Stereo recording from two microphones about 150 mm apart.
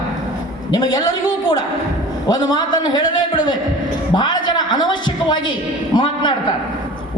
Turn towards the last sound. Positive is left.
turn(degrees=30)  # may be behind; listen again after turning